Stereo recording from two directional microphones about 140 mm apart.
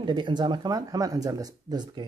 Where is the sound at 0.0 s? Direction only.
35° right (ahead or behind).